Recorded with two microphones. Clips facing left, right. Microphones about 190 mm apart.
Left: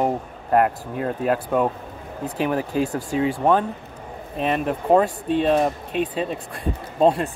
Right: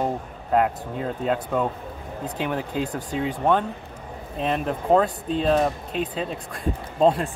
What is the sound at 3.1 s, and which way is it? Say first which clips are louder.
Speech: left 5 dB; 75° left (ahead or behind).